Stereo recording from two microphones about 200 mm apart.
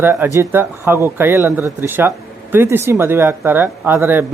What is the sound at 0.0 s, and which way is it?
Speech, 10° right (ahead or behind).